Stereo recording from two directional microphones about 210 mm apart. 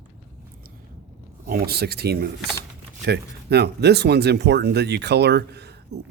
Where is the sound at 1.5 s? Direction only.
45° right (ahead or behind).